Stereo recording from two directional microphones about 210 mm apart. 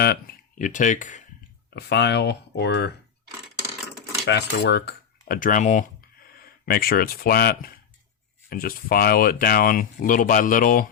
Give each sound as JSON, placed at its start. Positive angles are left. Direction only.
{"t": 0.6, "sound": "speech", "side_deg": 35}
{"t": 1.7, "sound": "speech", "side_deg": 55}
{"t": 4.3, "sound": "speech", "side_deg": 50}